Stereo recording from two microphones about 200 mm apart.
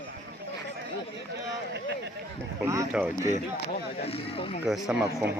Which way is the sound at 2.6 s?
15° right (ahead or behind).